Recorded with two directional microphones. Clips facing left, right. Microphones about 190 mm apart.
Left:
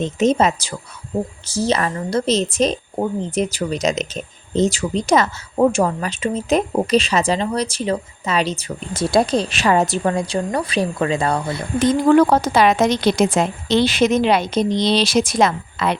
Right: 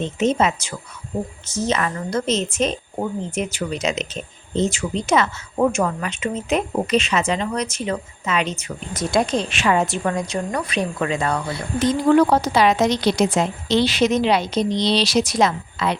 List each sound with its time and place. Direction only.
0.0 s a woman's voice: 40° left (ahead or behind)
11.8 s a woman's voice: 50° left (ahead or behind)